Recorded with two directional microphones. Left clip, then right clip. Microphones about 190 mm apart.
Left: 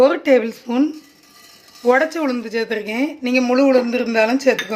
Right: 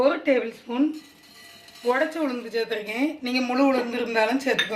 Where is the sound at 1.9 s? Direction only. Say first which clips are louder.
Left 8 dB; 55° left (ahead or behind).